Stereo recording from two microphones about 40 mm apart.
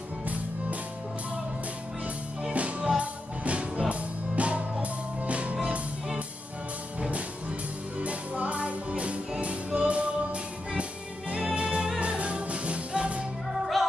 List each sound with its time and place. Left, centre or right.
0.2 s music: right
2.5 s music: right
7.0 s music: right
13.8 s music: centre